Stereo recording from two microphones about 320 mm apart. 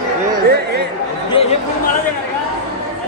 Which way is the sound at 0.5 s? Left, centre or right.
Right.